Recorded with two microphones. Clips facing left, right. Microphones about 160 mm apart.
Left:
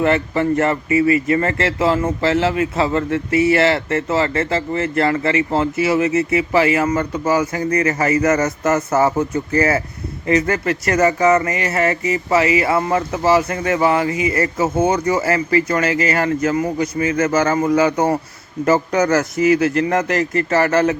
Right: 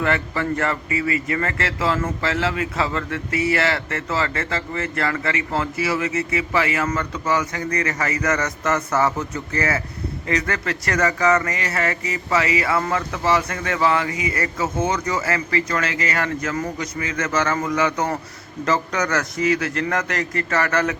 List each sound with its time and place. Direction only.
0.0 s speech: 20° left (ahead or behind)